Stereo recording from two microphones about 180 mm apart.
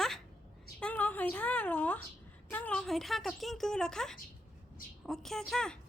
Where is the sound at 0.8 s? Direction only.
5° left (ahead or behind).